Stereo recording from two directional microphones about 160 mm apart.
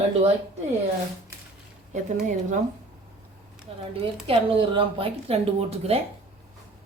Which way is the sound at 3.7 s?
35° right (ahead or behind).